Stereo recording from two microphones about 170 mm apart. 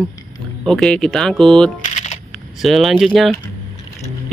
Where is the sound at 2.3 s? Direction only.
Centre (ahead or behind).